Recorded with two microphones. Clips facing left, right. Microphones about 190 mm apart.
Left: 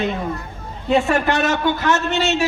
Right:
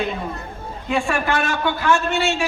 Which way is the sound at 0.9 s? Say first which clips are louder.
Left 4 dB; 20° left (ahead or behind).